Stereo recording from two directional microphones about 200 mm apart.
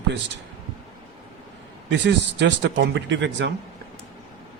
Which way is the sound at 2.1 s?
60° right (ahead or behind).